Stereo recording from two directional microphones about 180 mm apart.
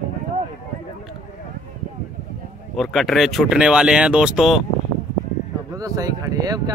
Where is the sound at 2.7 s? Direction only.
Centre (ahead or behind).